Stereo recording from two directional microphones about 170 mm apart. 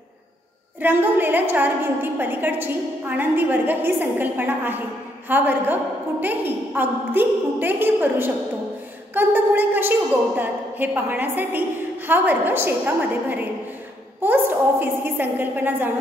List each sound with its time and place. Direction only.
0.7 s a woman's voice: 10° right (ahead or behind)